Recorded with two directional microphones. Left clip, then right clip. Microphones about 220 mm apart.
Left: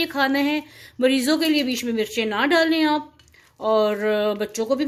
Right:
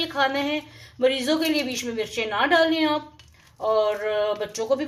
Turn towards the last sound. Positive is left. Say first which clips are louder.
# left 1 dB
turn(degrees=50)  # may be behind; listen again after turning